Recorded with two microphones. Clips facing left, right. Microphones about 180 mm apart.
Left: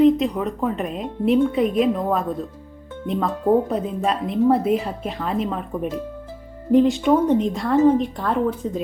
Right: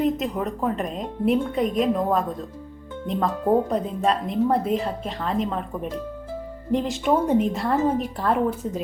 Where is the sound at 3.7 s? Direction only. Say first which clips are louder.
Even; 5° left (ahead or behind).